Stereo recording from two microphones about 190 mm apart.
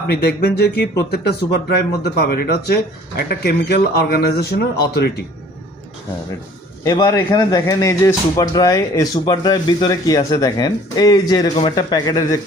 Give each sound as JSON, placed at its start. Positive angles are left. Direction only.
{"t": 0.1, "sound": "speech", "side_deg": 55}
{"t": 6.8, "sound": "speech", "side_deg": 20}